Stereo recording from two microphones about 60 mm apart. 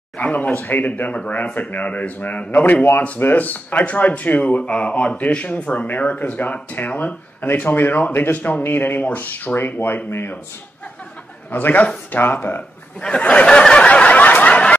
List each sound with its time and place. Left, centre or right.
0.2 s speech: left
11.5 s speech: left
13.2 s a sound: left